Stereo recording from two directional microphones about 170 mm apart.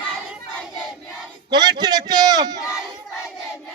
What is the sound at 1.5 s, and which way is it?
A man's voice, 25° right (ahead or behind).